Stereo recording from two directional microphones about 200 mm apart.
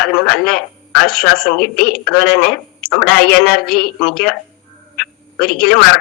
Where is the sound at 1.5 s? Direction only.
50° left (ahead or behind).